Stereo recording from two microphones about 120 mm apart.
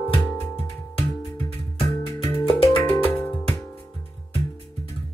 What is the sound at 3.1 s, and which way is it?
Music, 15° left (ahead or behind).